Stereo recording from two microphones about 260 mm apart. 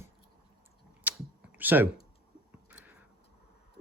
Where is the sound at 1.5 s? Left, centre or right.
Centre.